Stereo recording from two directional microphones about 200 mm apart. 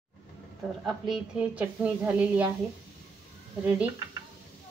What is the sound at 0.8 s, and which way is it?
A woman's voice, centre (ahead or behind).